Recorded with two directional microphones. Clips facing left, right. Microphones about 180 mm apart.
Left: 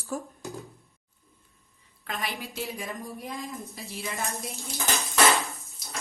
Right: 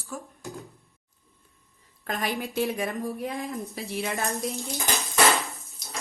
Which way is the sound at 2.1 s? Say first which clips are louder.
Right 5 dB; 45° right (ahead or behind).